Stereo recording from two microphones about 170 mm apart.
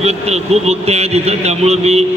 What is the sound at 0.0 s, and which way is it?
A man's voice, 40° right (ahead or behind).